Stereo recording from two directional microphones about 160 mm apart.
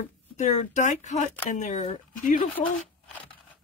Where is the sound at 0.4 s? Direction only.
50° left (ahead or behind).